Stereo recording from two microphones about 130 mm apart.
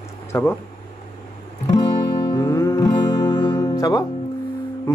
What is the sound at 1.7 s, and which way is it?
Music, 30° left (ahead or behind).